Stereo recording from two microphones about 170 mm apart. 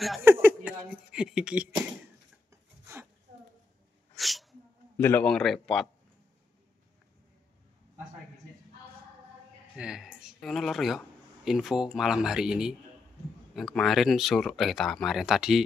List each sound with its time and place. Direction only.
0.2 s a sound: 15° right (ahead or behind)
1.1 s speech: 5° right (ahead or behind)
2.5 s filing: 15° right (ahead or behind)
4.2 s sneeze: centre (ahead or behind)
5.0 s speech: 10° left (ahead or behind)
9.8 s a sound: 5° right (ahead or behind)
10.2 s speech: centre (ahead or behind)